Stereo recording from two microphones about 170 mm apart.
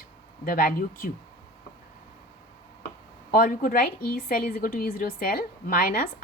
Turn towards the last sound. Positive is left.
turn(degrees=55)  # may be behind; listen again after turning